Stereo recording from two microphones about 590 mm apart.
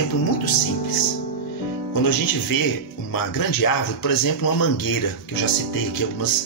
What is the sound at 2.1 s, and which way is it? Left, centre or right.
Speech, left.